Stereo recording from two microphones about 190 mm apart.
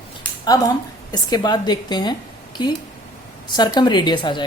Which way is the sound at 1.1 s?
20° left (ahead or behind).